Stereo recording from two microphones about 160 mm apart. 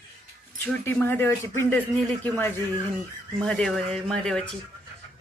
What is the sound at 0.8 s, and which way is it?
Speech, 15° left (ahead or behind).